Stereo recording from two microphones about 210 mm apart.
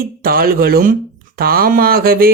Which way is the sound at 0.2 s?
45° right (ahead or behind).